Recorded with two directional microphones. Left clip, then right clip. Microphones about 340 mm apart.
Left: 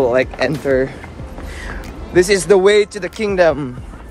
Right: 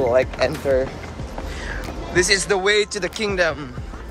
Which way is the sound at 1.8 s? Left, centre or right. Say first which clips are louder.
Left 6 dB; centre.